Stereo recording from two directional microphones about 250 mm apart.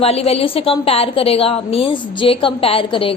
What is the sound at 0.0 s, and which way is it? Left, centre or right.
A woman's voice, left.